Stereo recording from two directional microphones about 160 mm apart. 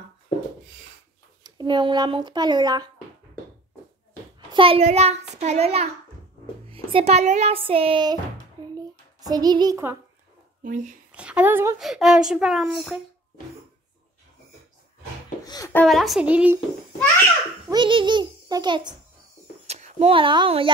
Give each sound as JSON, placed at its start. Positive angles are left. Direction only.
{"t": 1.4, "sound": "speech", "side_deg": -25}
{"t": 4.5, "sound": "speech", "side_deg": -35}
{"t": 8.7, "sound": "a sound", "side_deg": -25}
{"t": 10.6, "sound": "speech", "side_deg": -50}
{"t": 11.1, "sound": "speech", "side_deg": -10}
{"t": 11.8, "sound": "speech", "side_deg": 0}
{"t": 15.4, "sound": "a sound", "side_deg": 25}
{"t": 15.7, "sound": "speech", "side_deg": 5}
{"t": 17.6, "sound": "a child's voice", "side_deg": -30}
{"t": 19.6, "sound": "speech", "side_deg": -40}